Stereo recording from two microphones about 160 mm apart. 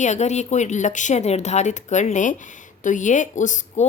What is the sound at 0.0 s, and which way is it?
A woman's voice, 45° left (ahead or behind).